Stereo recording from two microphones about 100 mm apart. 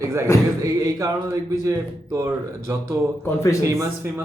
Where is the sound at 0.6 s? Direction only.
30° right (ahead or behind).